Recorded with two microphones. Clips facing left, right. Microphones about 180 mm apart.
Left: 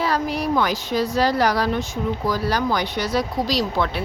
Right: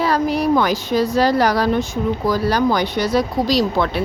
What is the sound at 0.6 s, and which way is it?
Speech, 35° right (ahead or behind).